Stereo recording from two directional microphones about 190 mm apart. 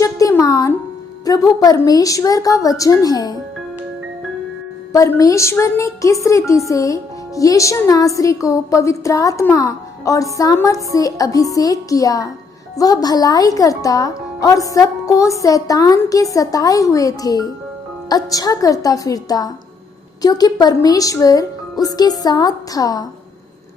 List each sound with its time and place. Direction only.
0.0 s music: 15° left (ahead or behind)
1.2 s a woman's voice: 20° left (ahead or behind)
4.9 s a woman's voice: 15° left (ahead or behind)